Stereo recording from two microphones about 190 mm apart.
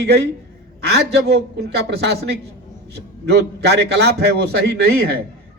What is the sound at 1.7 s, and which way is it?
A man's voice, 60° right (ahead or behind).